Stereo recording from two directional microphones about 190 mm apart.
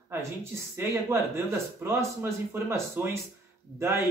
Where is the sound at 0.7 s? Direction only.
10° right (ahead or behind).